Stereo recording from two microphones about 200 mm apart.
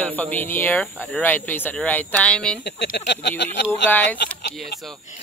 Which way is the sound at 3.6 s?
10° left (ahead or behind).